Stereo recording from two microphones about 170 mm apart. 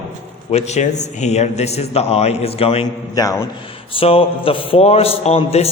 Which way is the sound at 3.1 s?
20° left (ahead or behind).